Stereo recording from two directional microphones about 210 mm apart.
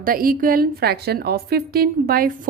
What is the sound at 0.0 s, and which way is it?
A woman's voice, 45° right (ahead or behind).